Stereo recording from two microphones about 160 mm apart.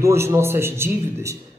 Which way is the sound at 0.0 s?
15° right (ahead or behind).